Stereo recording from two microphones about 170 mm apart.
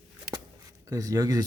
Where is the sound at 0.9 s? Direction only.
20° right (ahead or behind).